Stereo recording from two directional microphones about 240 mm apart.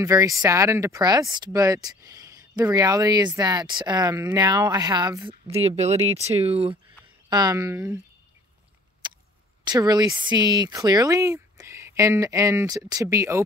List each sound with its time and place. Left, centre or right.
0.0 s speech: centre
9.0 s a sound: centre
9.7 s speech: centre